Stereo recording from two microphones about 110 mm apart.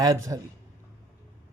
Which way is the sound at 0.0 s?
30° right (ahead or behind).